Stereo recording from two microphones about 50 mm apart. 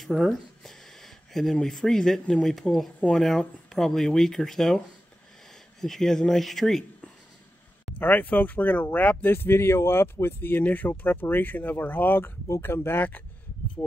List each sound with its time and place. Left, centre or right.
0.0 s speech: centre
5.8 s speech: centre
8.0 s speech: left
9.3 s speech: left
10.6 s speech: left